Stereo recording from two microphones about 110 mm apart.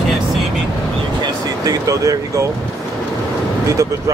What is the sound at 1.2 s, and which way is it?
Vehicle, 35° right (ahead or behind).